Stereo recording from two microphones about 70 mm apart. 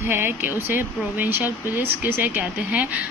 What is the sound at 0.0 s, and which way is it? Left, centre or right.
Speech, right.